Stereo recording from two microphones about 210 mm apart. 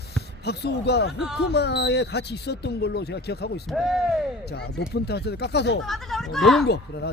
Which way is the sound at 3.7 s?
Centre (ahead or behind).